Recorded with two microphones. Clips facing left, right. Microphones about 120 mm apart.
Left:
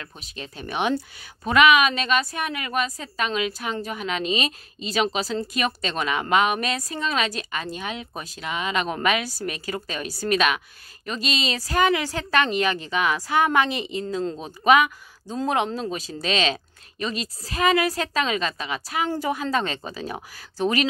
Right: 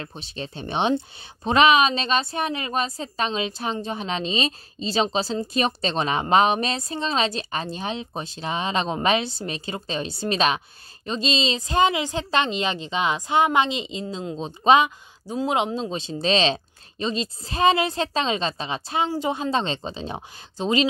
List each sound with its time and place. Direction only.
0.0 s speech: 30° right (ahead or behind)
15.2 s speech: 15° right (ahead or behind)